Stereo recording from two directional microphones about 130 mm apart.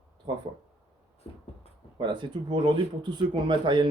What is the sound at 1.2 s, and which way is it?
Beatboxing, 50° left (ahead or behind).